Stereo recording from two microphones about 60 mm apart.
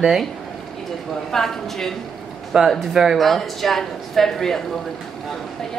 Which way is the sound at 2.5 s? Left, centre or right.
Centre.